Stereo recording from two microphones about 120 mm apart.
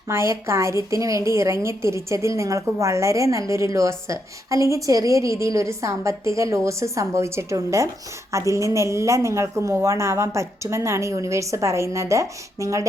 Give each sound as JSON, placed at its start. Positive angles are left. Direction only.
{"t": 0.1, "sound": "a woman's voice", "side_deg": -20}